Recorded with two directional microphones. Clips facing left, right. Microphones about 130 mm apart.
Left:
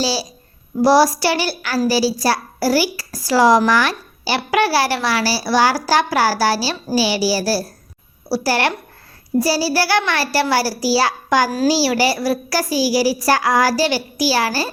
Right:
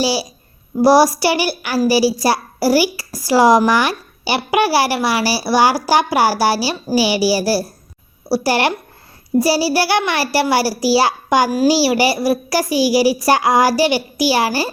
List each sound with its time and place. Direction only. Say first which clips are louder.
0.0 s a woman's voice: right 3 dB; 15° right (ahead or behind)
8.3 s child singing: right 2 dB; 20° right (ahead or behind)
10.1 s a woman's voice: right 2 dB; 20° right (ahead or behind)